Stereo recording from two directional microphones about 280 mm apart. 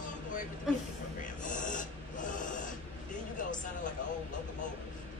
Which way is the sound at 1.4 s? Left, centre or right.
Left.